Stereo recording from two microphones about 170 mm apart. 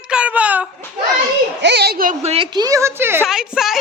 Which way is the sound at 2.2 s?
40° right (ahead or behind).